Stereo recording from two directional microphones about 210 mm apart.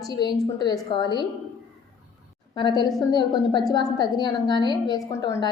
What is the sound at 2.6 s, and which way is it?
A woman's voice, 20° left (ahead or behind).